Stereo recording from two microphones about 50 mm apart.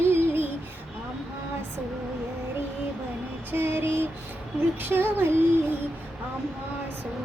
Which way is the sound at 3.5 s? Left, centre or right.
Right.